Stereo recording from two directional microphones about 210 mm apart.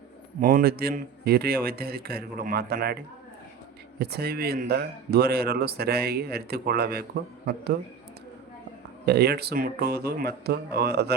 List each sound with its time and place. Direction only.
0.3 s speech: 45° right (ahead or behind)
9.0 s speech: 50° right (ahead or behind)